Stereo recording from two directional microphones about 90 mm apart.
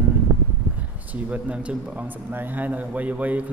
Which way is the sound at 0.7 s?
20° right (ahead or behind).